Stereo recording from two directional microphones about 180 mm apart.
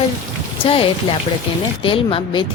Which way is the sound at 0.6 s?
30° left (ahead or behind).